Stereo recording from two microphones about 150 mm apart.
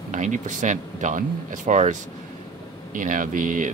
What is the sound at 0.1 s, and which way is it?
Speech, 55° right (ahead or behind).